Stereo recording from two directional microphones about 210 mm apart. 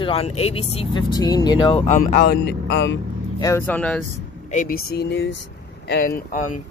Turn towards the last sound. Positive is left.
turn(degrees=45)  # may be behind; listen again after turning